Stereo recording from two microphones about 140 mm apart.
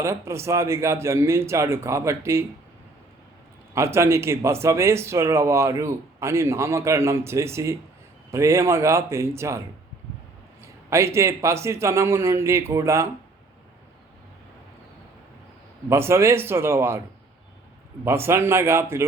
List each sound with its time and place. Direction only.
0.0 s speech: 20° right (ahead or behind)
3.8 s speech: 20° right (ahead or behind)
15.9 s speech: 20° right (ahead or behind)
18.0 s speech: 15° right (ahead or behind)